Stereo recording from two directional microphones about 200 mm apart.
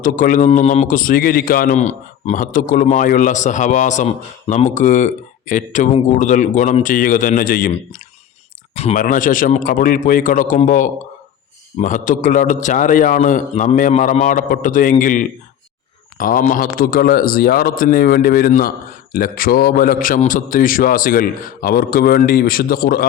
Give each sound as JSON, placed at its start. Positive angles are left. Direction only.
{"t": 0.0, "sound": "a man's voice", "side_deg": 40}
{"t": 8.7, "sound": "a man's voice", "side_deg": 30}